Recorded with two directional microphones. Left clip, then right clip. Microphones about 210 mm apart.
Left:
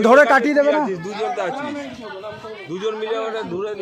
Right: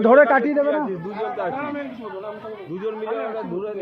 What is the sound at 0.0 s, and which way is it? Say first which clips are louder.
Speech: left 2 dB; 15° left (ahead or behind).